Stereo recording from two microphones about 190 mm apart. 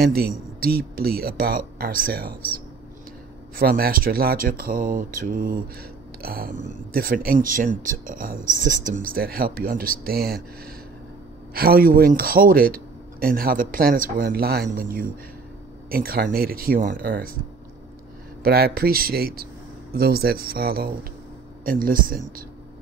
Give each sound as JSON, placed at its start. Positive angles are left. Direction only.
{"t": 0.0, "sound": "speech", "side_deg": -55}
{"t": 3.5, "sound": "speech", "side_deg": -50}
{"t": 18.4, "sound": "speech", "side_deg": -55}